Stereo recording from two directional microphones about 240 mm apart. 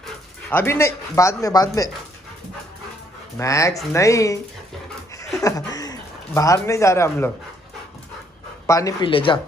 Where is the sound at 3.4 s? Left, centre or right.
Centre.